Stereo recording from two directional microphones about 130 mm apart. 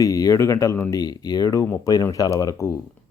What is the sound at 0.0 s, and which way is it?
Speech, 25° left (ahead or behind).